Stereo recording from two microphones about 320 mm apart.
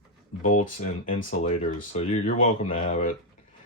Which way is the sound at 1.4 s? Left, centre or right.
Centre.